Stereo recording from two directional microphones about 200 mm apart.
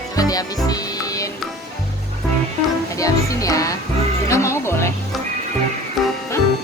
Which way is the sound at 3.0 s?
15° left (ahead or behind).